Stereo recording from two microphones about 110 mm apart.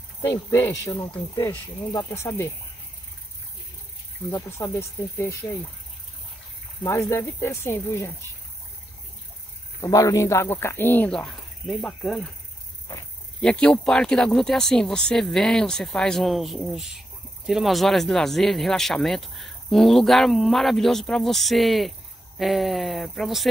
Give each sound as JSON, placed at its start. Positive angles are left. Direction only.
{"t": 0.2, "sound": "speech", "side_deg": 25}
{"t": 4.3, "sound": "speech", "side_deg": 25}
{"t": 6.9, "sound": "speech", "side_deg": 25}
{"t": 9.8, "sound": "speech", "side_deg": 30}
{"t": 11.1, "sound": "speech", "side_deg": 5}
{"t": 13.4, "sound": "speech", "side_deg": 5}